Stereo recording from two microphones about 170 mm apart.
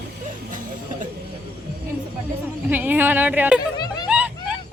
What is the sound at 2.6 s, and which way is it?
Speech, 10° right (ahead or behind).